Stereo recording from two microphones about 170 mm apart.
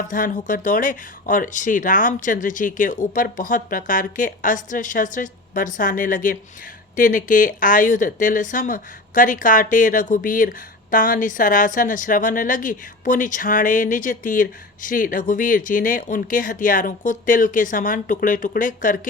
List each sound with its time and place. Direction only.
0.1 s a woman's voice: 50° left (ahead or behind)